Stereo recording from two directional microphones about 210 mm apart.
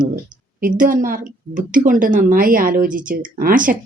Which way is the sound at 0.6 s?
40° right (ahead or behind).